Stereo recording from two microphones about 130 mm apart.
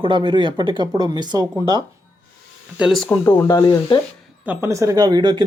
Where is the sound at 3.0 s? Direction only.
15° left (ahead or behind).